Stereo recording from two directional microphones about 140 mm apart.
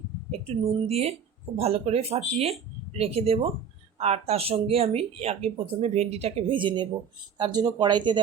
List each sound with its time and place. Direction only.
0.3 s speech: 45° right (ahead or behind)